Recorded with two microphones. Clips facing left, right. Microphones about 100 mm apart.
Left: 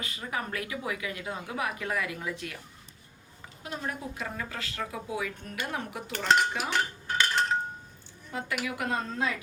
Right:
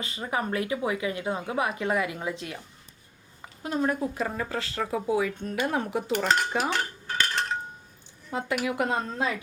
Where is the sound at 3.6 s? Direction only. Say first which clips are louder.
Right 9 dB; 40° right (ahead or behind).